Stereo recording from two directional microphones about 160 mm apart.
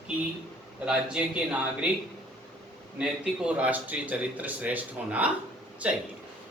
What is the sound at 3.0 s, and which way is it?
Speech, 5° right (ahead or behind).